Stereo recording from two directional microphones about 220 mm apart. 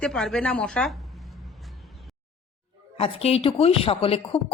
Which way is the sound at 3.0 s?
25° left (ahead or behind).